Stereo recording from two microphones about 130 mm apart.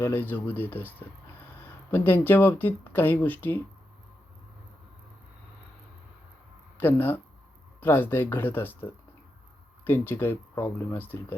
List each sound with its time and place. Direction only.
0.0 s speech: 15° left (ahead or behind)
6.7 s speech: 15° left (ahead or behind)